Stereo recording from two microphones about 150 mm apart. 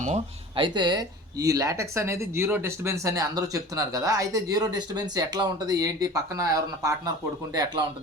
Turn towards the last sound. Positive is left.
turn(degrees=-25)  # may be behind; listen again after turning